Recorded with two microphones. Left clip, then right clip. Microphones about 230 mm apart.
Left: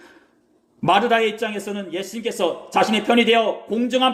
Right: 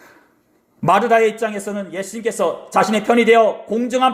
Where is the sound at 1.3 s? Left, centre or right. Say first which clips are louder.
Right 3 dB; centre.